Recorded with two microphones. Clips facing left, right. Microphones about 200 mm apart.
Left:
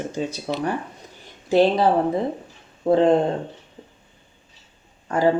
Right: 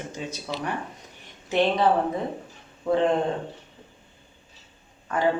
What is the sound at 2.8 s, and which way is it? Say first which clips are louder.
Speech: left 5 dB; 35° left (ahead or behind).